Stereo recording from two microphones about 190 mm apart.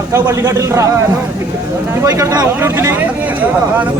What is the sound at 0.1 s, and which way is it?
Speech, 15° right (ahead or behind).